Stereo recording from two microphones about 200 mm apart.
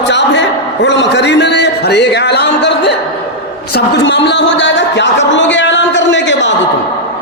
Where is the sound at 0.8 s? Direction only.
60° left (ahead or behind).